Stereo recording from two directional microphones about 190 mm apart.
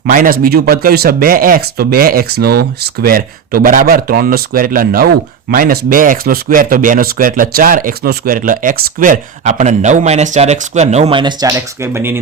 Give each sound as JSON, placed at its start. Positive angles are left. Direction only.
{"t": 0.0, "sound": "speech", "side_deg": -50}